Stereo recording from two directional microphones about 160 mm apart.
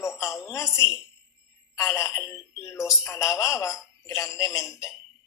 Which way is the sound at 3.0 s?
20° left (ahead or behind).